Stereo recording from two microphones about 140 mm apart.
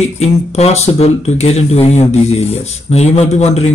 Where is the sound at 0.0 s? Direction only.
50° left (ahead or behind).